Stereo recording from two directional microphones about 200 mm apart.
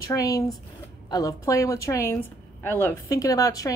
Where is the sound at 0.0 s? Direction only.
15° left (ahead or behind).